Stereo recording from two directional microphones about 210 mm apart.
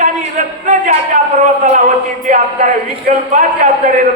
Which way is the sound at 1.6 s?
35° right (ahead or behind).